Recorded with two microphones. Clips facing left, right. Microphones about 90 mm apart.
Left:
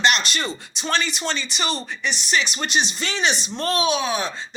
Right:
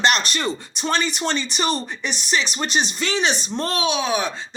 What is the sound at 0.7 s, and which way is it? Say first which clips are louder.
Speech: even; 50° right (ahead or behind).